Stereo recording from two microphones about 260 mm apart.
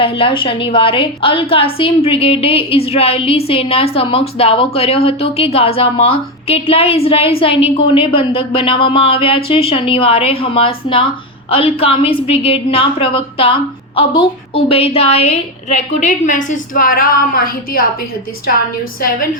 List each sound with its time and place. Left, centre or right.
0.0 s a woman's voice: centre